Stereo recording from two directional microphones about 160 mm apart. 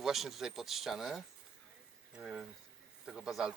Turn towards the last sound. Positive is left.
turn(degrees=-5)  # may be behind; listen again after turning